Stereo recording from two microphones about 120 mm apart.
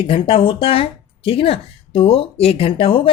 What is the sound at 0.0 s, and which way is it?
Speech, 50° left (ahead or behind).